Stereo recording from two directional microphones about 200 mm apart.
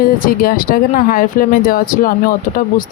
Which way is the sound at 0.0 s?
45° left (ahead or behind).